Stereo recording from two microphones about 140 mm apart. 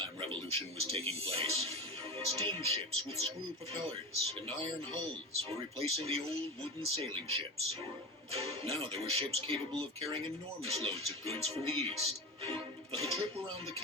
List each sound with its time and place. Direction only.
0.0 s a man's voice: 40° right (ahead or behind)
4.4 s speech: 40° right (ahead or behind)